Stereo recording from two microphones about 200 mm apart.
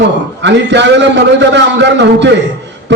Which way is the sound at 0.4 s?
60° right (ahead or behind).